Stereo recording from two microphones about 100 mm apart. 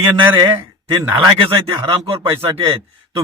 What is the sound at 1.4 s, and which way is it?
Speech, 60° right (ahead or behind).